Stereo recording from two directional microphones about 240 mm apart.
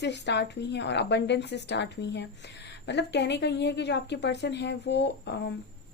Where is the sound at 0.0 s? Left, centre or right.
Left.